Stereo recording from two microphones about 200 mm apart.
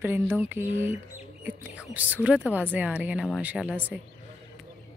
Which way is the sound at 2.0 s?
10° right (ahead or behind).